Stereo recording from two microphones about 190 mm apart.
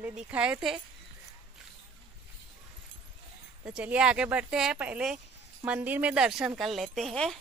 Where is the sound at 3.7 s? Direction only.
5° right (ahead or behind).